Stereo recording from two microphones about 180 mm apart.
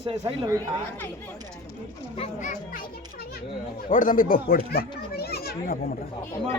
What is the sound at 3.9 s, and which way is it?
A child's voice, 45° left (ahead or behind).